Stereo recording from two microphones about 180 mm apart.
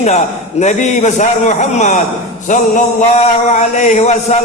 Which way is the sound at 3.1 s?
40° left (ahead or behind).